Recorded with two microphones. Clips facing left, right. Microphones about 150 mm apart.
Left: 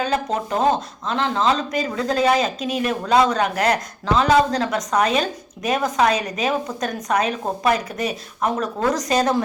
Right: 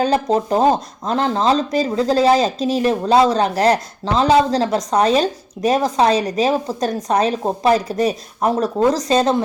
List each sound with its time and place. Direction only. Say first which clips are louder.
0.0 s speech: right 6 dB; 35° right (ahead or behind)